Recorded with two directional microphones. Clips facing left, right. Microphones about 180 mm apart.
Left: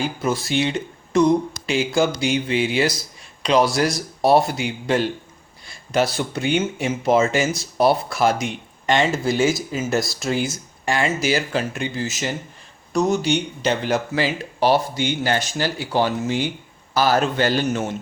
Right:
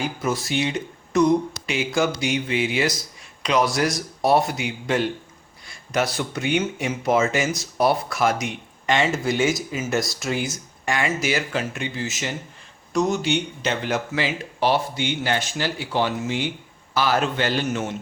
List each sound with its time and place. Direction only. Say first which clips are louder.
0.2 s speech: left 3 dB; 30° left (ahead or behind)